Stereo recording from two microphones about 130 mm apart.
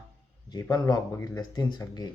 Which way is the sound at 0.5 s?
30° left (ahead or behind).